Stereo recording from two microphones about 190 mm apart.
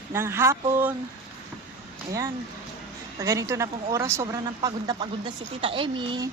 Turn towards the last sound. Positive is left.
turn(degrees=-25)  # may be behind; listen again after turning